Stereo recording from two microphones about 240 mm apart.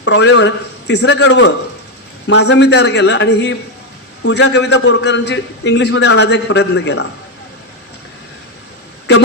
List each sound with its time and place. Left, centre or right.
0.0 s a man's voice: left